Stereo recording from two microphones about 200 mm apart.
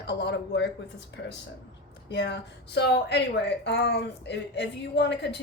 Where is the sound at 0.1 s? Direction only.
60° left (ahead or behind).